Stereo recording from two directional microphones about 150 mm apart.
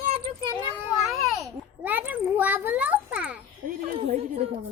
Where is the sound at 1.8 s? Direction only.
10° right (ahead or behind).